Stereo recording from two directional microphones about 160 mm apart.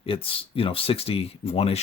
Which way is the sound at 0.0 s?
35° left (ahead or behind).